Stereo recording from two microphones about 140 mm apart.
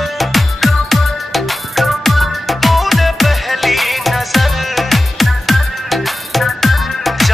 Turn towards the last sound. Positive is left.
turn(degrees=0)  # may be behind; listen again after turning